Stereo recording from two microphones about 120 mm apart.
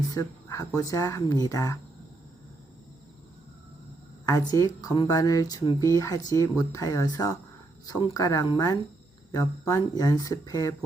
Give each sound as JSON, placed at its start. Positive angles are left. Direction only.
{"t": 0.1, "sound": "speech", "side_deg": 30}
{"t": 4.3, "sound": "speech", "side_deg": 30}